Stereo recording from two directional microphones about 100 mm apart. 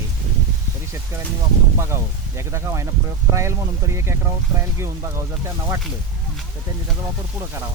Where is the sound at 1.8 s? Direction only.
25° right (ahead or behind).